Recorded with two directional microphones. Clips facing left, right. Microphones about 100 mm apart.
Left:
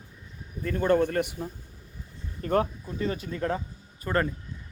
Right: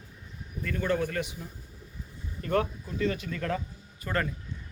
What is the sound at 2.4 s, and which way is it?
Speech, 35° left (ahead or behind).